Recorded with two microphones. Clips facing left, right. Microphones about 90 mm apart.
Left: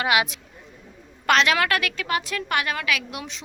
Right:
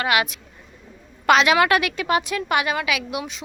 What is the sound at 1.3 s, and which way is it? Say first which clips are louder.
A woman's voice: right 4 dB; 10° right (ahead or behind).